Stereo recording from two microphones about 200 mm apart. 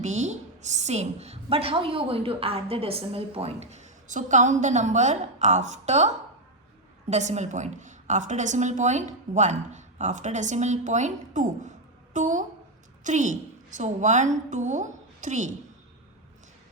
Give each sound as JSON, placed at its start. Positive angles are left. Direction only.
{"t": 0.0, "sound": "a woman's voice", "side_deg": -35}